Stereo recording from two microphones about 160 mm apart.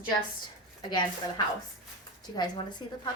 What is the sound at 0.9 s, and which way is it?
A woman's voice, 25° left (ahead or behind).